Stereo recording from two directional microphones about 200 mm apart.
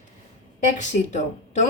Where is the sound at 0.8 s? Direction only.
35° left (ahead or behind).